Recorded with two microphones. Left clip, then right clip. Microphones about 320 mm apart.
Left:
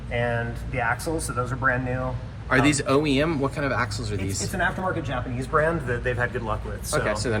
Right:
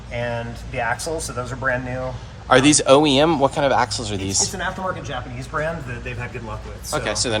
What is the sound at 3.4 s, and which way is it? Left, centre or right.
Speech, centre.